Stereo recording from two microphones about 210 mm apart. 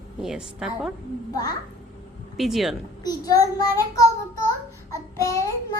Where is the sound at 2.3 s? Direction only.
Centre (ahead or behind).